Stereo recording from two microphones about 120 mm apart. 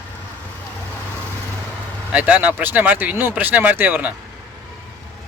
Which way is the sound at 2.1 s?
10° right (ahead or behind).